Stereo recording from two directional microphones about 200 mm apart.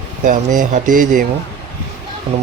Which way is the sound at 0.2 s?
40° right (ahead or behind).